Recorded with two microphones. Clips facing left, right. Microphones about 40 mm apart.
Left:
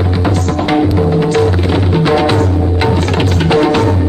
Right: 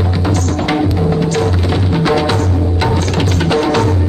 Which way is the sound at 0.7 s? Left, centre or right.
Centre.